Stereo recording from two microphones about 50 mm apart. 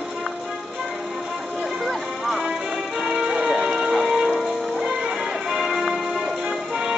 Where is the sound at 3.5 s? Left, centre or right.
Centre.